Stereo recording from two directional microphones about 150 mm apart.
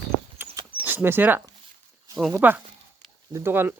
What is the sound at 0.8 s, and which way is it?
Speech, 15° right (ahead or behind).